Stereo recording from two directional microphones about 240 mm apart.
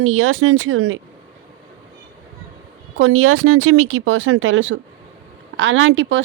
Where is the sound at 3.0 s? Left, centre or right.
Right.